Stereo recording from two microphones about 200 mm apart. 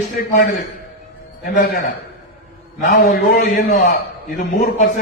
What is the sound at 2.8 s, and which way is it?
A man's voice, 45° left (ahead or behind).